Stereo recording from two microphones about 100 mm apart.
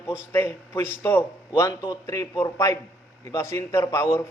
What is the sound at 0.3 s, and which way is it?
A man's voice, 25° left (ahead or behind).